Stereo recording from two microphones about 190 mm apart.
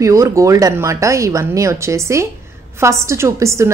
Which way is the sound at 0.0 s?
15° right (ahead or behind).